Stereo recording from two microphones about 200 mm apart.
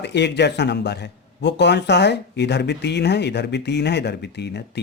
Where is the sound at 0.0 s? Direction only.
60° left (ahead or behind).